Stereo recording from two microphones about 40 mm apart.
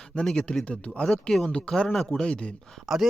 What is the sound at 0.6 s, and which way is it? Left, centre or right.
Speech, left.